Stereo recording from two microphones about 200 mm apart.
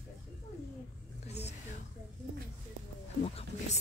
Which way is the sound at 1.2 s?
35° left (ahead or behind).